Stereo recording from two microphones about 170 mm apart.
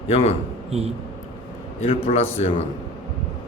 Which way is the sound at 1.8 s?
35° left (ahead or behind).